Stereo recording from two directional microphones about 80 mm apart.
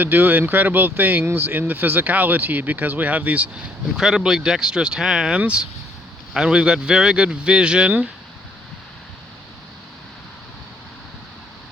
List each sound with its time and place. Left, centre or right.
0.0 s speech: right
3.9 s speech: centre